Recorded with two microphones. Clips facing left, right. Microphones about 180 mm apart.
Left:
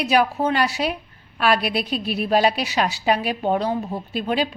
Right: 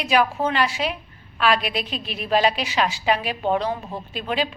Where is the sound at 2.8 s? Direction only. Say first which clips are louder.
Left 1 dB; 40° left (ahead or behind).